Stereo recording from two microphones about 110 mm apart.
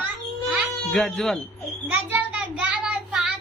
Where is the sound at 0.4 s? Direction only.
10° right (ahead or behind).